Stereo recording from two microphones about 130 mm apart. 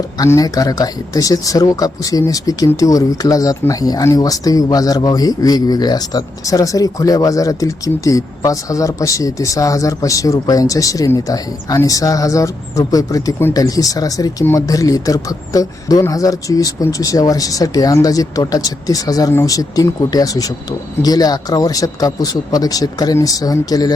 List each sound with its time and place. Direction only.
0.2 s speech: 30° left (ahead or behind)